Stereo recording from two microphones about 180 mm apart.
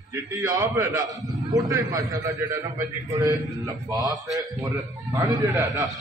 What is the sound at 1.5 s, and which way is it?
A man's voice, 20° right (ahead or behind).